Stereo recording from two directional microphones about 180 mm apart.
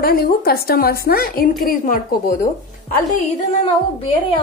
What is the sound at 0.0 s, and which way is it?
A woman's voice, 55° left (ahead or behind).